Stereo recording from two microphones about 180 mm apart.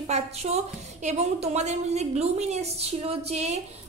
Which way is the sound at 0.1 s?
35° right (ahead or behind).